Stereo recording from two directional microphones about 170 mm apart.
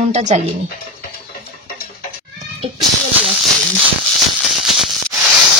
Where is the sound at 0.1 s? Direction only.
45° right (ahead or behind).